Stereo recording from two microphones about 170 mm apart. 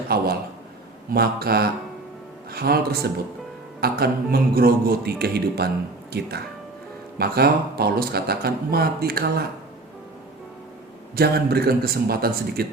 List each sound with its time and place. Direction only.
0.1 s speech: 65° right (ahead or behind)
11.1 s speech: 65° right (ahead or behind)